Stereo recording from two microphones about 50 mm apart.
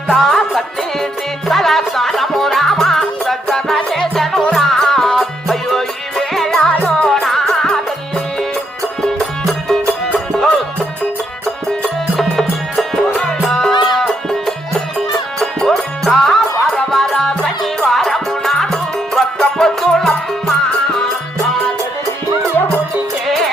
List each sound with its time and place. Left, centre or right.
0.1 s music: centre
7.1 s music: centre
11.7 s music: centre